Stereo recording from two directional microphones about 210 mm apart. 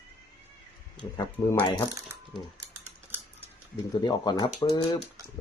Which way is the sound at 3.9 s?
20° left (ahead or behind).